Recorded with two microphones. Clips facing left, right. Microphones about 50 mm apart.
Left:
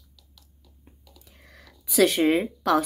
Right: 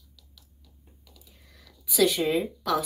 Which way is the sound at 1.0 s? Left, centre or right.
Left.